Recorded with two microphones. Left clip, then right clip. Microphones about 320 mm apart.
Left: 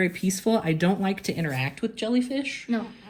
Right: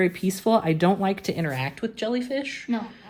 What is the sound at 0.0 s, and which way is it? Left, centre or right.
Speech, right.